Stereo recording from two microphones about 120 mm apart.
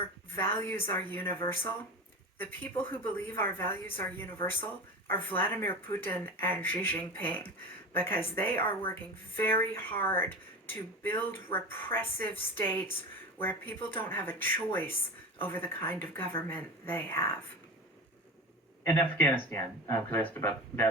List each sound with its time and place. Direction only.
0.3 s speech: 20° left (ahead or behind)
1.4 s speech: 45° left (ahead or behind)
2.4 s speech: 15° left (ahead or behind)
18.9 s speech: 15° left (ahead or behind)